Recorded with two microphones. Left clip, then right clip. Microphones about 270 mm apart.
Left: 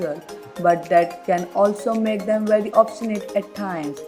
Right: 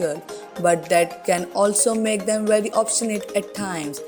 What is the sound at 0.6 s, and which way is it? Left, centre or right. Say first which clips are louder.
Speech: left 1 dB; right.